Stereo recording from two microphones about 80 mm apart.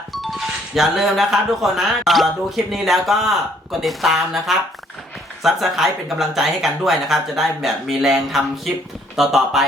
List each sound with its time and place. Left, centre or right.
0.1 s speech: centre